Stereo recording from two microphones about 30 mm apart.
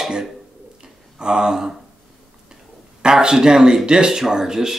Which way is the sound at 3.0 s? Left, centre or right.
Right.